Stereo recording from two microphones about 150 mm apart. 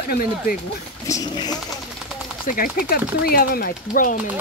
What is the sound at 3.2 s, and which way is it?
Speech, 90° left.